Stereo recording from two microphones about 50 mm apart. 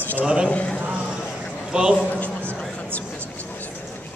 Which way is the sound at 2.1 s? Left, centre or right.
Left.